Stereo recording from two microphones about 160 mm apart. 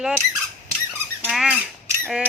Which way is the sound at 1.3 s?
Centre (ahead or behind).